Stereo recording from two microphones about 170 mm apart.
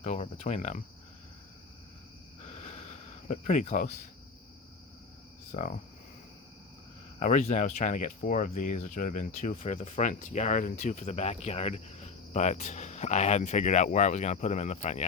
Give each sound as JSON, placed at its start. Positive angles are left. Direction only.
{"t": 0.0, "sound": "cricket", "side_deg": 40}
{"t": 2.4, "sound": "a sound", "side_deg": 40}
{"t": 5.5, "sound": "speech", "side_deg": 45}
{"t": 7.2, "sound": "speech", "side_deg": 45}